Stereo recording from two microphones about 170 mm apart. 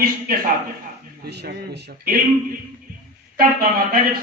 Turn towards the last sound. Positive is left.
turn(degrees=-60)  # may be behind; listen again after turning